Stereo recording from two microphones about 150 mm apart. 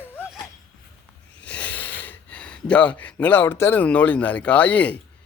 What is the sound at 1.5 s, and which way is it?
Speech, 10° left (ahead or behind).